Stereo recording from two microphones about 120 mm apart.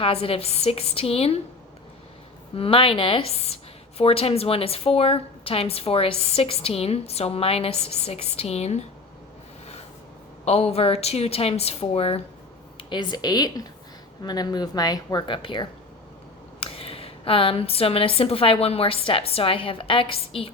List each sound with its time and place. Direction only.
0.0 s a woman's voice: 55° left (ahead or behind)
2.6 s a woman's voice: 50° left (ahead or behind); by 8.8 s 65° left (ahead or behind)
10.4 s a woman's voice: 60° left (ahead or behind)
12.7 s a woman's voice: 40° left (ahead or behind)